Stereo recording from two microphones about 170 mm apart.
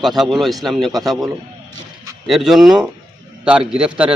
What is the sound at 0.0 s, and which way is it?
A man's voice, centre (ahead or behind).